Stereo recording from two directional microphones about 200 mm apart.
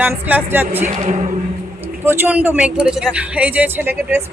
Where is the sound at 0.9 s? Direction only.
35° right (ahead or behind).